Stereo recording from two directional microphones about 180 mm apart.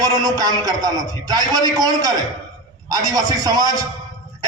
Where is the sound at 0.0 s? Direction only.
20° right (ahead or behind).